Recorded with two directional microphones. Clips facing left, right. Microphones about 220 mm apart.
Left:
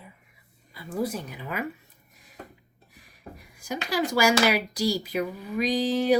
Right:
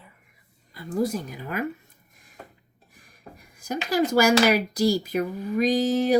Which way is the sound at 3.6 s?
45° right (ahead or behind).